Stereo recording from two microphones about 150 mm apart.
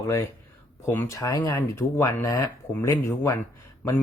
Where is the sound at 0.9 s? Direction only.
20° left (ahead or behind).